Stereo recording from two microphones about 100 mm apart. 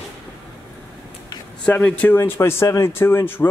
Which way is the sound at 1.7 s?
15° left (ahead or behind).